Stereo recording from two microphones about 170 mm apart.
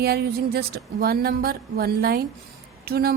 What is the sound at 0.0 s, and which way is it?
A woman's voice, 70° right (ahead or behind).